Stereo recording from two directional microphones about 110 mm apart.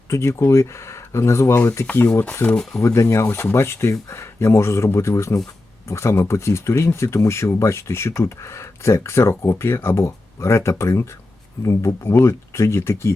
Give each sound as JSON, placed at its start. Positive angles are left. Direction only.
{"t": 0.1, "sound": "speech", "side_deg": 25}